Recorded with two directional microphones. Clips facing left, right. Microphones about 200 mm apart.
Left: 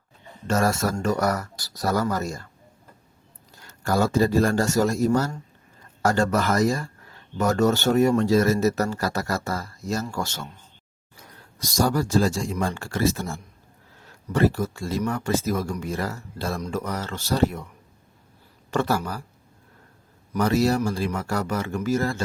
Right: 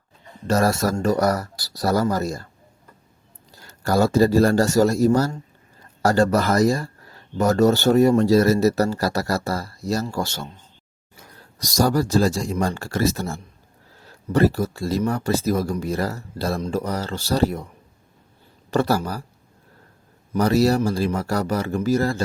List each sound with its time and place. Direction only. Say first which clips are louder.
0.4 s speech: right 3 dB; 35° right (ahead or behind)
3.5 s speech: right 3 dB; 35° right (ahead or behind)
11.6 s speech: right 3 dB; 35° right (ahead or behind)
18.7 s speech: right 3 dB; 35° right (ahead or behind)
20.3 s speech: right 3 dB; 35° right (ahead or behind)